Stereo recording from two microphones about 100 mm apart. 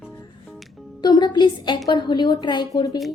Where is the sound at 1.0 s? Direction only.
45° left (ahead or behind).